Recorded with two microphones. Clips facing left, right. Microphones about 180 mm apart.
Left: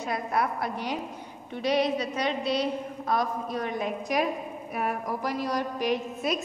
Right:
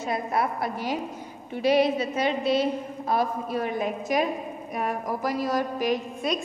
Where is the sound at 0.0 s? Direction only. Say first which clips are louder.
Right 2 dB; centre (ahead or behind).